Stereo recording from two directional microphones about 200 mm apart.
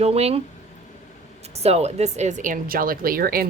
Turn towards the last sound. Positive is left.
turn(degrees=-45)  # may be behind; listen again after turning